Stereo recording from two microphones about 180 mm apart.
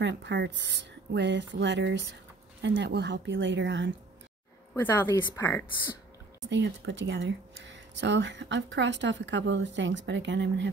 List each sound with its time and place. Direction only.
0.0 s speech: 80° right
4.9 s a woman's voice: 20° left (ahead or behind)
6.5 s speech: 85° right